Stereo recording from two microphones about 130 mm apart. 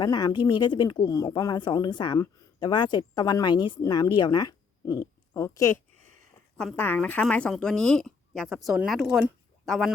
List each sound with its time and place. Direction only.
0.0 s speech: 30° left (ahead or behind); by 9.9 s centre (ahead or behind)